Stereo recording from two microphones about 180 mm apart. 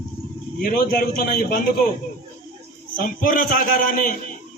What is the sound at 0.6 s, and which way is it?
Speech, 55° left (ahead or behind).